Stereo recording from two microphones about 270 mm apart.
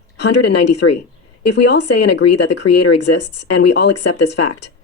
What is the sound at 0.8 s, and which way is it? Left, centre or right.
A woman's voice, left.